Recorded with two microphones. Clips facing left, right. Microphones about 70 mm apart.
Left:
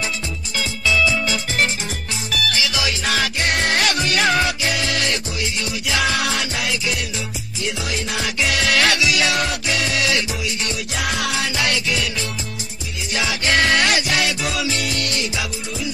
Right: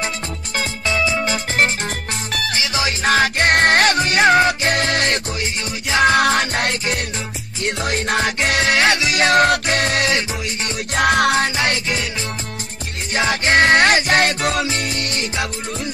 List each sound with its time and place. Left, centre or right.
0.6 s music: right
3.9 s music: right
8.6 s music: right
13.1 s music: right
14.7 s music: right